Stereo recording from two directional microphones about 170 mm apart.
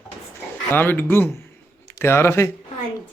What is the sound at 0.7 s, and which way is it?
Speech, 10° left (ahead or behind).